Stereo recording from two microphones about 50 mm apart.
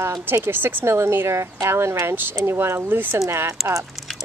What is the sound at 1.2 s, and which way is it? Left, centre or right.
Speech, right.